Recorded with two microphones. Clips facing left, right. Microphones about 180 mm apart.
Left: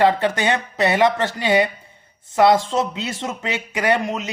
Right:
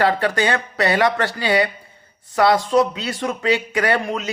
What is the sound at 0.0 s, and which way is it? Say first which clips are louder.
A man's voice: left 1 dB; 20° left (ahead or behind).